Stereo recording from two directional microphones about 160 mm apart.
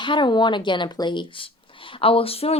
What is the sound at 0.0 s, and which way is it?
Speech, 30° left (ahead or behind).